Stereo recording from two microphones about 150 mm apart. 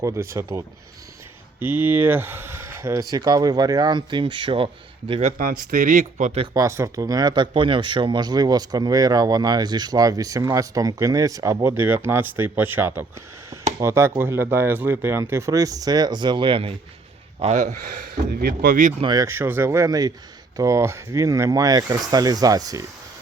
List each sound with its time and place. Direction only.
0.0 s speech: 20° right (ahead or behind); by 5.3 s 35° right (ahead or behind)
5.4 s speech: 65° right (ahead or behind)
6.5 s speech: 20° right (ahead or behind); by 16.7 s 35° right (ahead or behind)
17.4 s speech: 50° right (ahead or behind)
18.1 s speech: 80° right; by 19.0 s 60° right (ahead or behind)
19.0 s speech: 25° right (ahead or behind)